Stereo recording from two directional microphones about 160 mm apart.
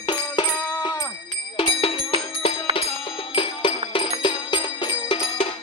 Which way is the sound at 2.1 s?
35° left (ahead or behind).